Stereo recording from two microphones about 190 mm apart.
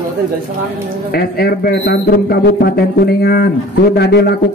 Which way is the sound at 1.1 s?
55° left (ahead or behind).